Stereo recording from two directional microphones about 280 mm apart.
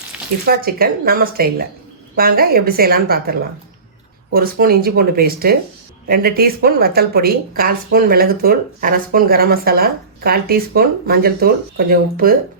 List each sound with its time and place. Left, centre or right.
0.4 s speech: right
4.4 s speech: right